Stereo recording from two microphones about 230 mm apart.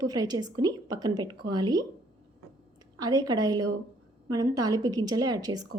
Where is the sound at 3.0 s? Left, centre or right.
Centre.